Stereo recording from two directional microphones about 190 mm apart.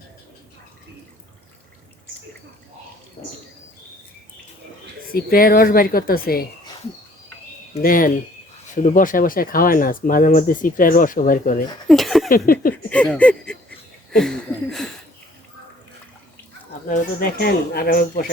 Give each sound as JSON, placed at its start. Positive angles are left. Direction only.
{"t": 5.1, "sound": "speech", "side_deg": 50}
{"t": 7.8, "sound": "speech", "side_deg": 45}
{"t": 11.9, "sound": "a sound", "side_deg": 0}
{"t": 16.9, "sound": "speech", "side_deg": 45}